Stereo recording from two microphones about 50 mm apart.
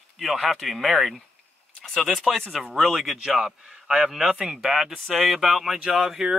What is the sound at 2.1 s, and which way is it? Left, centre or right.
Speech, centre.